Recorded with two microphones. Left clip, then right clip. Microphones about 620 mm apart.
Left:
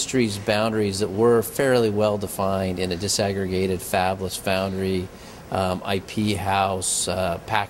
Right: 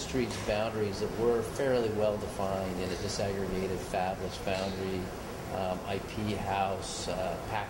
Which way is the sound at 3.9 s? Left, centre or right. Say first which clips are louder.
Left 10 dB; left.